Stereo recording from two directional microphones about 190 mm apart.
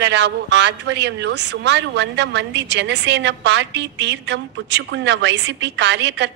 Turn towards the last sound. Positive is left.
turn(degrees=-65)  # may be behind; listen again after turning